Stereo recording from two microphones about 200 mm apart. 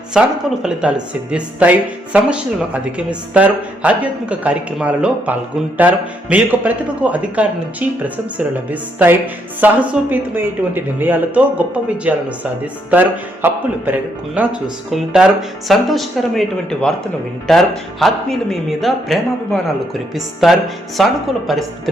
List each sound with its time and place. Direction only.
0.1 s speech: 5° right (ahead or behind)